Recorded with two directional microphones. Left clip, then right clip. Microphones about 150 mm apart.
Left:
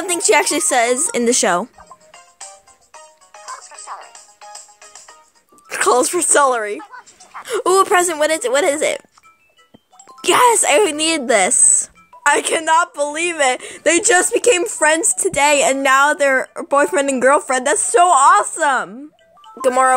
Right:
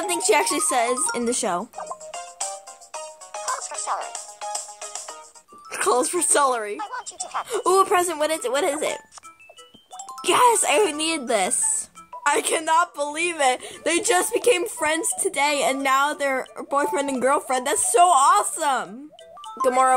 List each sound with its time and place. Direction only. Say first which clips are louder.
0.0 s speech: left 5 dB; 25° left (ahead or behind)
2.0 s music: right 7 dB; 65° right (ahead or behind)
5.7 s speech: left 7 dB; 30° left (ahead or behind)
6.8 s a sound: right 5 dB; 60° right (ahead or behind)
7.4 s speech: left 5 dB; 25° left (ahead or behind)
10.2 s speech: left 5 dB; 30° left (ahead or behind)